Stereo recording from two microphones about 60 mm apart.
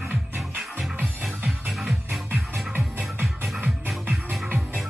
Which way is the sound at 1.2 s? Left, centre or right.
Centre.